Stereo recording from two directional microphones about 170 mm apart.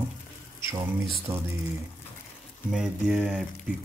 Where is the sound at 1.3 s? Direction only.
20° right (ahead or behind).